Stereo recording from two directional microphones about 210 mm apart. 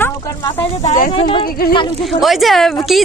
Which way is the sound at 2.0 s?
Centre (ahead or behind).